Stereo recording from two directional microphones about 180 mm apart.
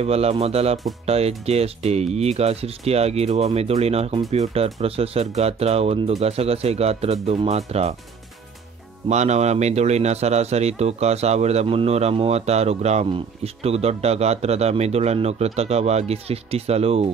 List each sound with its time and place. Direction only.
0.0 s speech: 35° right (ahead or behind)
9.1 s speech: 40° right (ahead or behind)